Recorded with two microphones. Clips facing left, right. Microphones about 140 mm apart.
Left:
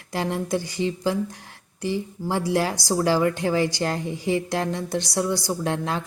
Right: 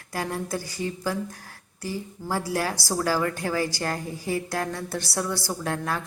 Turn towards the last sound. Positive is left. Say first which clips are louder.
# left 3 dB
turn(degrees=20)  # may be behind; listen again after turning